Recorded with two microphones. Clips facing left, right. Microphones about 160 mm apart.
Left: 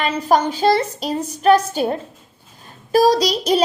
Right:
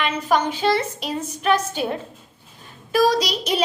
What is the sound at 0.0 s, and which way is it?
Child singing, 35° left (ahead or behind).